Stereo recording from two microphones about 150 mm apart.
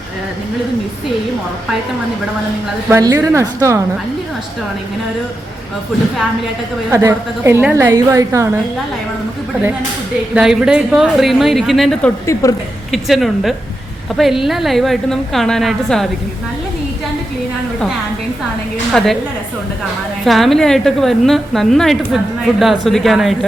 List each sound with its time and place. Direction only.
2.9 s a woman's voice: 20° right (ahead or behind)
6.9 s a woman's voice: 20° right (ahead or behind)
10.3 s a woman's voice: 5° right (ahead or behind)
12.2 s a woman's voice: 20° left (ahead or behind)
12.9 s a woman's voice: centre (ahead or behind)
20.2 s a woman's voice: centre (ahead or behind)